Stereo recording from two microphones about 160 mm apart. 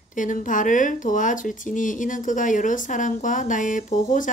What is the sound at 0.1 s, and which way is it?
Speech, 55° left (ahead or behind).